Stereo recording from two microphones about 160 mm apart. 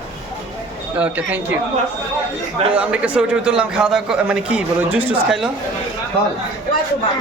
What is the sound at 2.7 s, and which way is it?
A man's voice, 10° right (ahead or behind).